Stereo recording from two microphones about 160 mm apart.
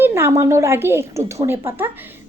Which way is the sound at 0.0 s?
15° right (ahead or behind).